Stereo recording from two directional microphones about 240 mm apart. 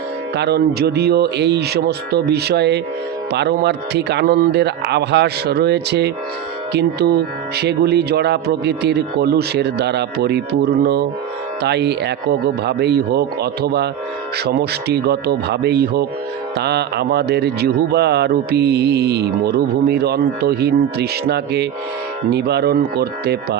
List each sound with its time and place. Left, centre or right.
0.3 s speech: right